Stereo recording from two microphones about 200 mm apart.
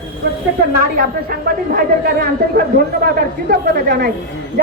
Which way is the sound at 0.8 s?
45° right (ahead or behind).